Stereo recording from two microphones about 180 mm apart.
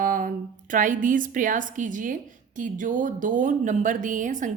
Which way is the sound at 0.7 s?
45° right (ahead or behind).